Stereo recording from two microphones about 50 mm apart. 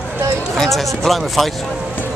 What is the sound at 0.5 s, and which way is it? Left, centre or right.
Speech, centre.